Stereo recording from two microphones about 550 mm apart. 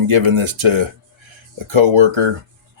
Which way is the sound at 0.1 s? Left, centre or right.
Right.